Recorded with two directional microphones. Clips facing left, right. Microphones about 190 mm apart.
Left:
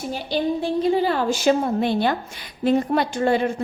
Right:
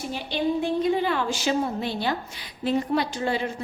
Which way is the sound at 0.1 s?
35° left (ahead or behind).